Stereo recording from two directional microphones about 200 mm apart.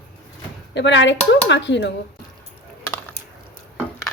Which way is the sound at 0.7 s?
60° left (ahead or behind).